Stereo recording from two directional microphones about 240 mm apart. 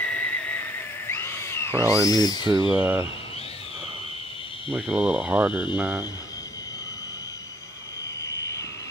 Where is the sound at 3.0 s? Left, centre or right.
Left.